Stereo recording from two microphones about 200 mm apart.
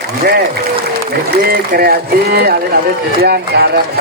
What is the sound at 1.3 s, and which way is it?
Speech, 50° right (ahead or behind).